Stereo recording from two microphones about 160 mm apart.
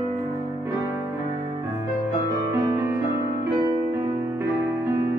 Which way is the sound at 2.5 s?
15° right (ahead or behind).